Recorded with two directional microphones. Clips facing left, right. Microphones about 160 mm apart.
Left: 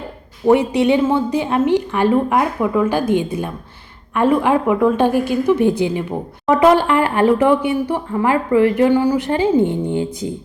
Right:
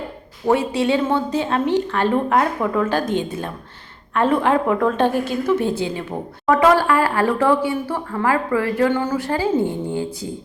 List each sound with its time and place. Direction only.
0.4 s a woman's voice: 15° left (ahead or behind)